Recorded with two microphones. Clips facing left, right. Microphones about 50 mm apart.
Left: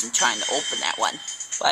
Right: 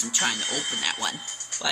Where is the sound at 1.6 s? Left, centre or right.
Left.